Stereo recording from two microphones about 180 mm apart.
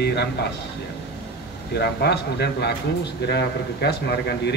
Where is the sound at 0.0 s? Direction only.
70° left (ahead or behind).